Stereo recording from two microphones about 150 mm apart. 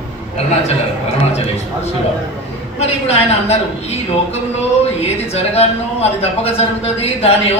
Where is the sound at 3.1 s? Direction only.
45° left (ahead or behind).